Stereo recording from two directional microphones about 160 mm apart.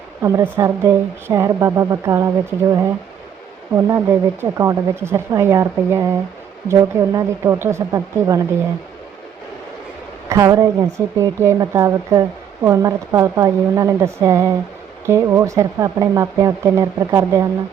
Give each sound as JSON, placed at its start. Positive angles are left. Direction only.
{"t": 0.2, "sound": "a woman's voice", "side_deg": -20}
{"t": 10.2, "sound": "speech", "side_deg": -20}